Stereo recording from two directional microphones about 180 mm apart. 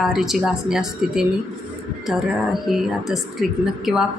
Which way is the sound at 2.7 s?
Centre (ahead or behind).